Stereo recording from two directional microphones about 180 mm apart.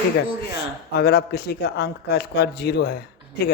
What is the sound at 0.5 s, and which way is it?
Speech, 65° left (ahead or behind).